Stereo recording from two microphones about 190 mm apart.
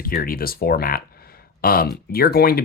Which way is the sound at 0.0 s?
50° left (ahead or behind).